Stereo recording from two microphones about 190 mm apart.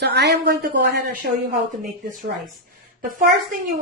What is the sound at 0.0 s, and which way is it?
A woman's voice, 60° right (ahead or behind).